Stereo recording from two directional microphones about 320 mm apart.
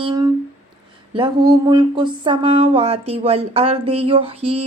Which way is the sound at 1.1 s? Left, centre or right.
Centre.